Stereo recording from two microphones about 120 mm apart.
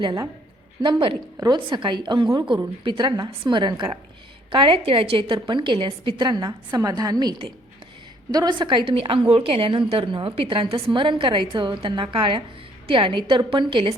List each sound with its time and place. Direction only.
0.8 s a woman's voice: 45° right (ahead or behind)